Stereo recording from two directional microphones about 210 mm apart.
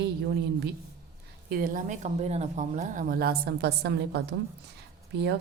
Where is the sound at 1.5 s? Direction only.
45° right (ahead or behind).